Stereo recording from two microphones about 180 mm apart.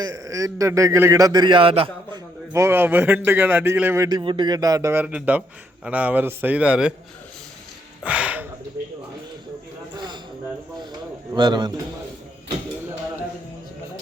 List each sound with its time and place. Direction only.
0.0 s speech: 20° right (ahead or behind)
2.5 s a man's voice: 15° right (ahead or behind)
4.2 s a man's voice: 25° right (ahead or behind); by 6.9 s 5° right (ahead or behind)
8.0 s a sound: 10° right (ahead or behind)
11.3 s speech: 25° right (ahead or behind)